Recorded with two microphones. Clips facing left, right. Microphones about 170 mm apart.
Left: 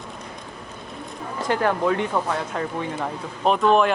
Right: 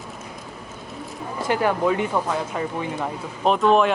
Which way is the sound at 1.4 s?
10° right (ahead or behind).